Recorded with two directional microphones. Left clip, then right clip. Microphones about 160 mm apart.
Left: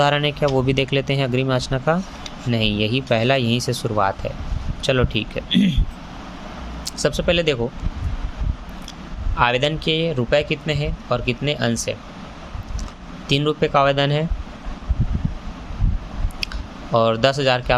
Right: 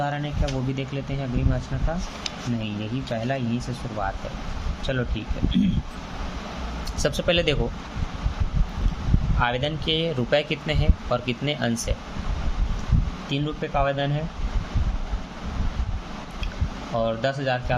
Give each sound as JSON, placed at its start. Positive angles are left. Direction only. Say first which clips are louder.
{"t": 0.0, "sound": "speech", "louder": "left 10 dB", "side_deg": 55}
{"t": 7.0, "sound": "speech", "louder": "left 4 dB", "side_deg": 25}
{"t": 9.4, "sound": "speech", "louder": "left 7 dB", "side_deg": 40}
{"t": 9.9, "sound": "speech", "louder": "left 2 dB", "side_deg": 20}
{"t": 13.2, "sound": "speech", "louder": "left 11 dB", "side_deg": 50}
{"t": 16.9, "sound": "speech", "louder": "left 8 dB", "side_deg": 50}